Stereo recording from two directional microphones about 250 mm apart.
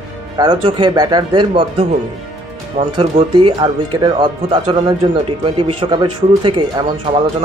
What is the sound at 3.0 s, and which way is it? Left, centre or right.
Speech, right.